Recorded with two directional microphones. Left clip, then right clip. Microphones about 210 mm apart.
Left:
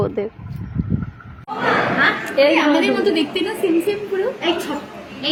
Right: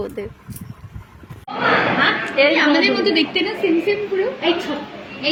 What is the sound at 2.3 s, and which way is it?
Speech, 20° left (ahead or behind).